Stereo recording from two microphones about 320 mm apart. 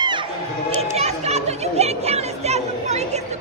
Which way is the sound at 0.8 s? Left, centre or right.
Centre.